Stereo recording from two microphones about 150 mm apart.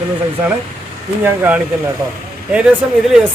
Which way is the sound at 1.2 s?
10° right (ahead or behind).